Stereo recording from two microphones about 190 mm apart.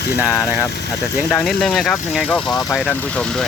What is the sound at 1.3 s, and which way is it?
Speech, 5° left (ahead or behind).